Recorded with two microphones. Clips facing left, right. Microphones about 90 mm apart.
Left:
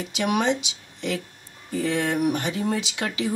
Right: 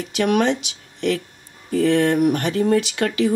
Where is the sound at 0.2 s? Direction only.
60° right (ahead or behind).